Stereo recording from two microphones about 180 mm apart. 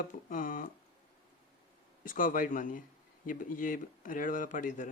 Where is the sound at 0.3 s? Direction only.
50° left (ahead or behind).